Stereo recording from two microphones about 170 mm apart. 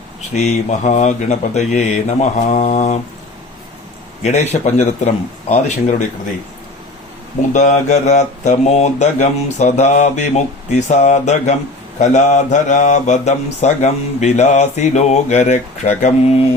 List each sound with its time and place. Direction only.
0.2 s speech: 45° left (ahead or behind)
4.2 s speech: 40° left (ahead or behind)
7.5 s speech: 45° left (ahead or behind)